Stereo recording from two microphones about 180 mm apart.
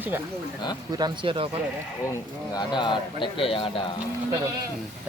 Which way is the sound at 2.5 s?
25° left (ahead or behind).